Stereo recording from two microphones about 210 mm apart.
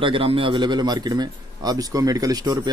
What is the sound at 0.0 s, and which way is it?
A man's voice, 25° right (ahead or behind).